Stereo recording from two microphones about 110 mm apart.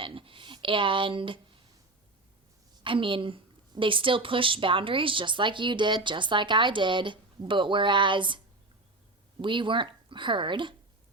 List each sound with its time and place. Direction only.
0.0 s a sound: 55° right (ahead or behind)
2.8 s a woman's voice: 50° right (ahead or behind)
9.4 s a woman's voice: 50° right (ahead or behind)